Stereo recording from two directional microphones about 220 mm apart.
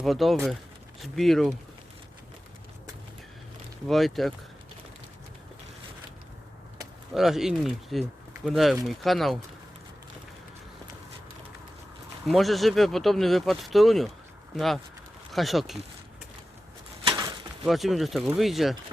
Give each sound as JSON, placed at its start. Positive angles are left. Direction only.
{"t": 0.0, "sound": "speech", "side_deg": 0}
{"t": 3.8, "sound": "speech", "side_deg": 0}
{"t": 7.1, "sound": "speech", "side_deg": 0}
{"t": 12.3, "sound": "speech", "side_deg": 0}
{"t": 17.0, "sound": "bird", "side_deg": -20}
{"t": 17.7, "sound": "speech", "side_deg": 0}